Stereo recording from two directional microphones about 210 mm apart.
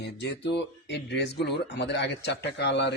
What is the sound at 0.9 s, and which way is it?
A man's voice, 55° left (ahead or behind).